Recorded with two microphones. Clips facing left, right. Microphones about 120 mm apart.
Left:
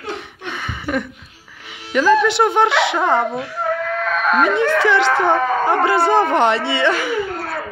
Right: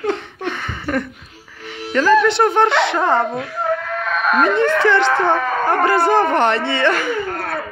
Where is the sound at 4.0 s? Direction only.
10° right (ahead or behind).